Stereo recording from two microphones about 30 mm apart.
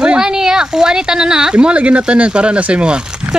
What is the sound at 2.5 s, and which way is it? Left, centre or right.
Speech, right.